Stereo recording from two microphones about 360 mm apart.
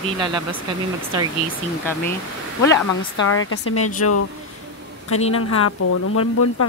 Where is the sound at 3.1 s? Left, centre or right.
Left.